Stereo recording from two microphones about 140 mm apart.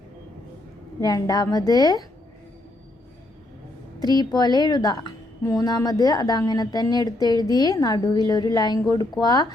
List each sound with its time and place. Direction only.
1.0 s a woman's voice: 25° left (ahead or behind)
4.0 s a woman's voice: 30° left (ahead or behind)